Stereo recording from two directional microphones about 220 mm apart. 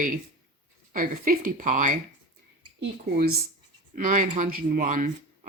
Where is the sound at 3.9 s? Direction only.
35° right (ahead or behind).